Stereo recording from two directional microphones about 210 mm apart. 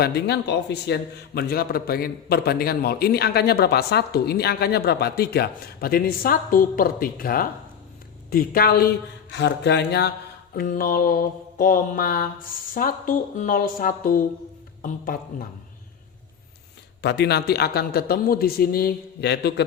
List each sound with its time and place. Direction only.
0.0 s a man's voice: 50° left (ahead or behind)
17.0 s a man's voice: 50° left (ahead or behind)